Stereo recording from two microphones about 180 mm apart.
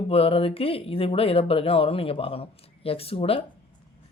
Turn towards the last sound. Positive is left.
turn(degrees=30)  # may be behind; listen again after turning